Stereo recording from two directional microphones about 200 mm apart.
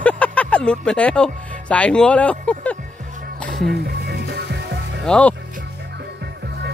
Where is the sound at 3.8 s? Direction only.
55° right (ahead or behind).